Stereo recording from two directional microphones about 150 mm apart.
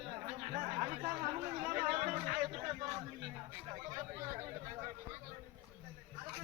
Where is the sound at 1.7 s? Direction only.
65° right (ahead or behind).